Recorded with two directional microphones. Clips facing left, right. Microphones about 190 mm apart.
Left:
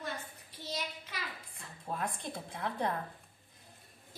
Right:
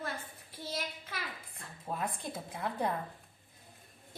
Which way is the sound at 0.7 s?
55° right (ahead or behind).